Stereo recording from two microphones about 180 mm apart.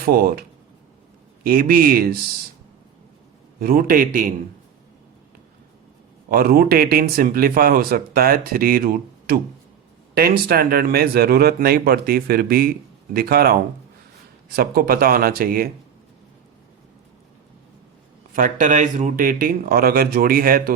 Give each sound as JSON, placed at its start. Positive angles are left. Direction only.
{"t": 0.0, "sound": "speech", "side_deg": -55}
{"t": 1.5, "sound": "speech", "side_deg": -55}
{"t": 3.6, "sound": "speech", "side_deg": -55}
{"t": 6.3, "sound": "speech", "side_deg": -55}
{"t": 18.3, "sound": "speech", "side_deg": -45}